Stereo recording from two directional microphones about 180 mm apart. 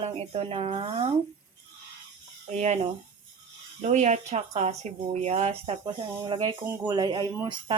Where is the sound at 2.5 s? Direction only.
40° right (ahead or behind).